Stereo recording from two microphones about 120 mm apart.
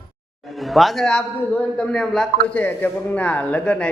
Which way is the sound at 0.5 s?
Centre (ahead or behind).